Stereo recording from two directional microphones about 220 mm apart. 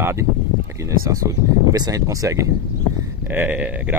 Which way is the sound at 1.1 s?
15° right (ahead or behind).